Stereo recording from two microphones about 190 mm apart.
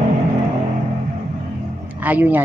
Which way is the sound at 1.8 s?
10° right (ahead or behind).